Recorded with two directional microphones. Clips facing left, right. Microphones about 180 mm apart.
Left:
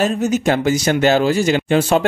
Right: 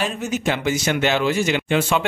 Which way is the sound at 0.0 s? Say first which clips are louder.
Left 7 dB; 40° left (ahead or behind).